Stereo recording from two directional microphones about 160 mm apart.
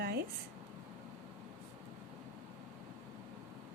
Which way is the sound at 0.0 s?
75° right (ahead or behind).